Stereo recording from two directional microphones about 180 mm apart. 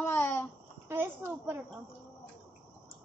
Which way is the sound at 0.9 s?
15° right (ahead or behind).